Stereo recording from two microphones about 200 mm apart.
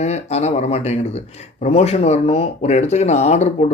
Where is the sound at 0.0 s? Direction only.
35° left (ahead or behind).